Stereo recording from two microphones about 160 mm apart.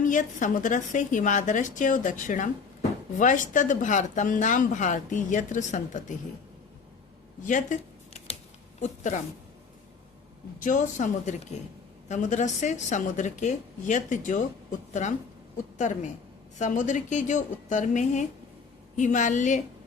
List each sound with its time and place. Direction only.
0.0 s a woman's voice: 55° left (ahead or behind)
7.4 s a sound: 50° left (ahead or behind)
8.8 s a woman's voice: 50° left (ahead or behind)
10.6 s a woman's voice: 50° left (ahead or behind)
16.6 s a woman's voice: 50° left (ahead or behind)